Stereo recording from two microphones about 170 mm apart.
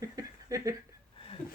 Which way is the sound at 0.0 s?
20° right (ahead or behind).